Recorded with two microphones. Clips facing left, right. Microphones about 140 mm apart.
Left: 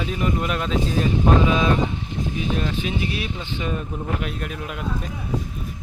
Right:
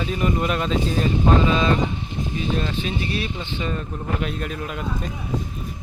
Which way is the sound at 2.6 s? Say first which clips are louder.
Left 1 dB; 5° left (ahead or behind).